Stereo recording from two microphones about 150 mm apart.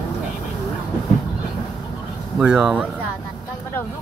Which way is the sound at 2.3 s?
5° right (ahead or behind).